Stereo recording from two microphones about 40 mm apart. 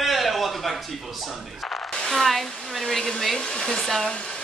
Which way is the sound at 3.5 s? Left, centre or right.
Centre.